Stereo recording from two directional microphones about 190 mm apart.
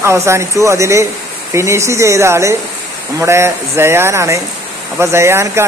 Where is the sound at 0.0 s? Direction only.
15° right (ahead or behind).